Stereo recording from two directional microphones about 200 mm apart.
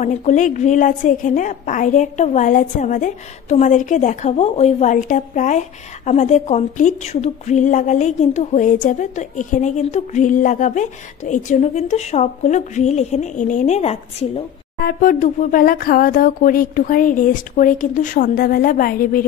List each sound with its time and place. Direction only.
0.0 s a woman's voice: 35° left (ahead or behind)
14.8 s speech: 45° left (ahead or behind)